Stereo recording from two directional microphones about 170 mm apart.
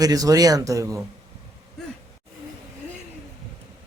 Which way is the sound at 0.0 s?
20° right (ahead or behind).